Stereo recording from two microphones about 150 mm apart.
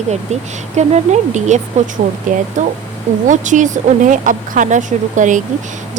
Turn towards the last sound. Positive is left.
turn(degrees=-55)  # may be behind; listen again after turning